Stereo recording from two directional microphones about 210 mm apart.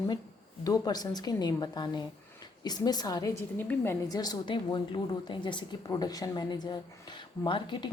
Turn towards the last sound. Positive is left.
turn(degrees=20)  # may be behind; listen again after turning